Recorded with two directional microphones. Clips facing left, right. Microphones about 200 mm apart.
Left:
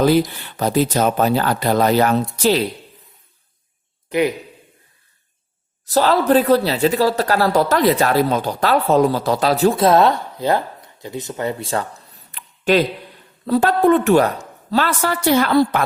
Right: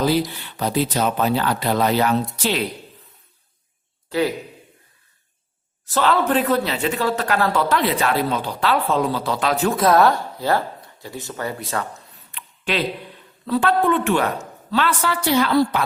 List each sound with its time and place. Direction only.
0.0 s a man's voice: 50° left (ahead or behind)
4.1 s a man's voice: 15° left (ahead or behind)
5.8 s a man's voice: 40° left (ahead or behind)
12.3 s a sound: 40° left (ahead or behind)
13.4 s a man's voice: 40° left (ahead or behind)